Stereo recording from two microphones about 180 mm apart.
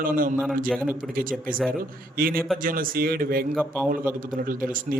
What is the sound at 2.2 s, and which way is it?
Speech, 55° right (ahead or behind).